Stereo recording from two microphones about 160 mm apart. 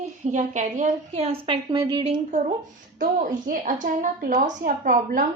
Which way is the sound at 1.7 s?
25° right (ahead or behind).